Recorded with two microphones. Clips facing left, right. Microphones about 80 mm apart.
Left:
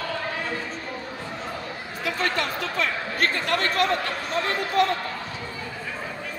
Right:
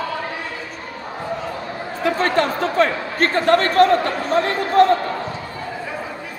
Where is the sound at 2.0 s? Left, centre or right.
Right.